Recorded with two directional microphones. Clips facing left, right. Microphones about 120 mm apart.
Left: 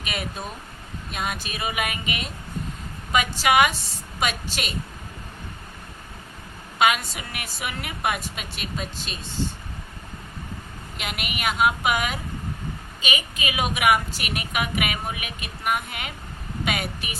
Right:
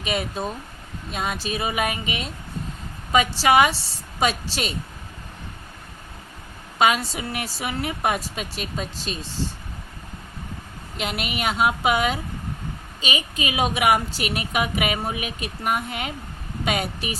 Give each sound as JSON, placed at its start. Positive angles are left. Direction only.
{"t": 0.0, "sound": "a woman's voice", "side_deg": -30}
{"t": 6.7, "sound": "a woman's voice", "side_deg": -30}
{"t": 10.9, "sound": "a woman's voice", "side_deg": -35}